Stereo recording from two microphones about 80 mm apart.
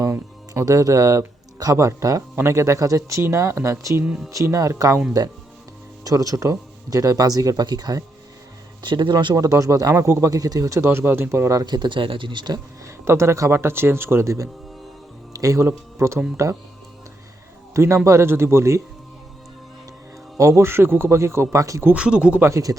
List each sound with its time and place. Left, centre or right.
0.1 s music: right
1.7 s speech: right
6.1 s speech: right
8.8 s speech: right
9.3 s speech: right
10.8 s speech: right
11.6 s speech: right
12.8 s speech: right
17.7 s speech: right
20.4 s speech: right
21.9 s speech: centre
22.4 s speech: right